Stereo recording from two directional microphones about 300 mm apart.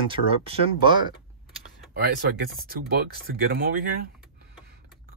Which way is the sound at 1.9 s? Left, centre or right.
Right.